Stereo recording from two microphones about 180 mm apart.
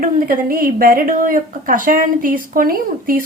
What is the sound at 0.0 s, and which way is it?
A woman's voice, 50° right (ahead or behind).